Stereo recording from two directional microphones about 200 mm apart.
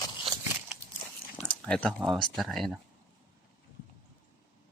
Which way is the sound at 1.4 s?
5° left (ahead or behind).